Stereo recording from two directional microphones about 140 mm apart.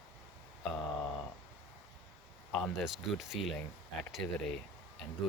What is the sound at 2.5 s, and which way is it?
Speech, centre (ahead or behind).